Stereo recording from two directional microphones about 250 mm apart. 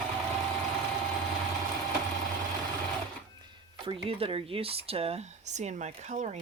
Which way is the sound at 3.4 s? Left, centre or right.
Centre.